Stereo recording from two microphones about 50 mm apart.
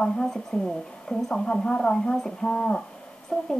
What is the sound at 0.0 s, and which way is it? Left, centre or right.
A woman's voice, centre.